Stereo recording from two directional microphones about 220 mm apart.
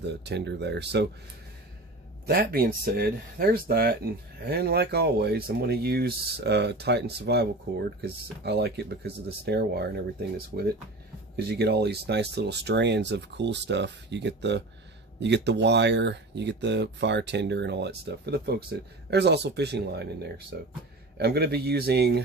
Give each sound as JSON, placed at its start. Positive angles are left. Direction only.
{"t": 0.0, "sound": "speech", "side_deg": -50}
{"t": 2.2, "sound": "speech", "side_deg": -45}